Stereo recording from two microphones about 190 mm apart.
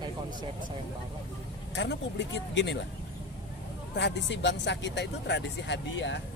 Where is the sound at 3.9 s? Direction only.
65° left (ahead or behind).